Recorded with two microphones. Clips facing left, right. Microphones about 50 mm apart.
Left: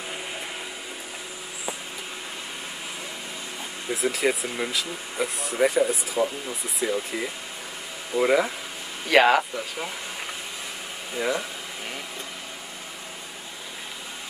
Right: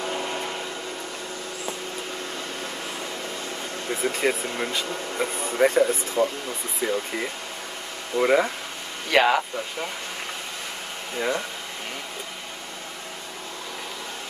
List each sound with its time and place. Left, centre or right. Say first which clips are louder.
0.0 s vacuum cleaner: right 6 dB; right
3.9 s speech: even; centre
9.1 s speech: left 2 dB; centre
11.1 s speech: even; centre